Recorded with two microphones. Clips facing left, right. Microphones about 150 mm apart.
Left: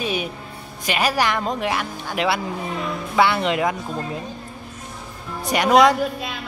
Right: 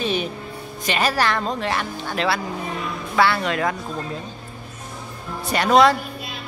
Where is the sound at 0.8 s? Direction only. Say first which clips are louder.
Even; 10° left (ahead or behind).